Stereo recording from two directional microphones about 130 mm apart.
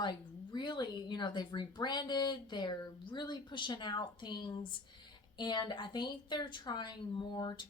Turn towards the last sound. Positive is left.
turn(degrees=35)  # may be behind; listen again after turning